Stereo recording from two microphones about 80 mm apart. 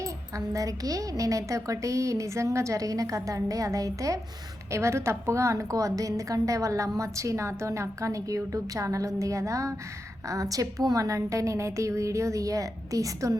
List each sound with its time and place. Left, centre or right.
0.0 s a woman's voice: right